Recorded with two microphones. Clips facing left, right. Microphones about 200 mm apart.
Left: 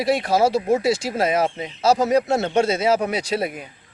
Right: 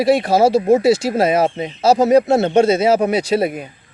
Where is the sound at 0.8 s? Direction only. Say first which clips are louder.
Right 7 dB; 5° right (ahead or behind).